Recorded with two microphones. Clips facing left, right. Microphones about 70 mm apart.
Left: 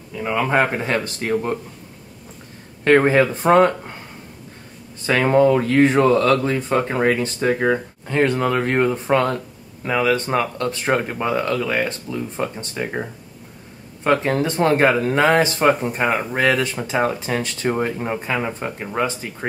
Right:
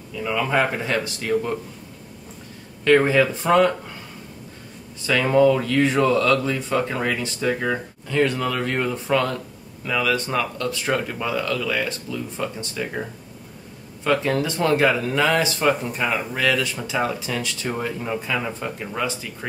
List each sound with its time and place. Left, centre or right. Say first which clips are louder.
0.1 s speech: left 3 dB; left
2.8 s speech: left 2 dB; left
5.0 s speech: left 2 dB; left
14.0 s speech: left 3 dB; left